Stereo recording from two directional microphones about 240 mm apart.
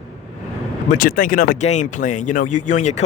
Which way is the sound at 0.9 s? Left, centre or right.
Left.